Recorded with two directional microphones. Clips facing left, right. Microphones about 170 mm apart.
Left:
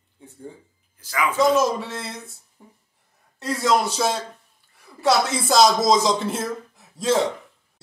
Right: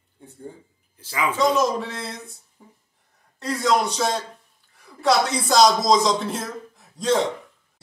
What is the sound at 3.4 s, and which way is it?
Speech, centre (ahead or behind).